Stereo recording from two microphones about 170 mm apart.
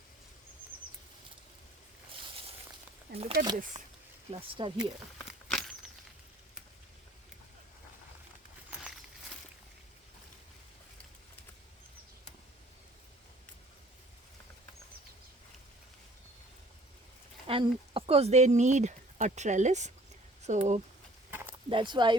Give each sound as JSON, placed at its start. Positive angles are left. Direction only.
{"t": 3.1, "sound": "speech", "side_deg": -65}
{"t": 4.3, "sound": "speech", "side_deg": -30}
{"t": 5.1, "sound": "a sound", "side_deg": 0}
{"t": 17.4, "sound": "speech", "side_deg": -30}
{"t": 21.2, "sound": "a sound", "side_deg": -10}
{"t": 21.7, "sound": "speech", "side_deg": -30}